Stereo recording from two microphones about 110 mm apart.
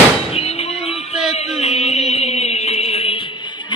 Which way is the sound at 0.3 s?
65° left (ahead or behind).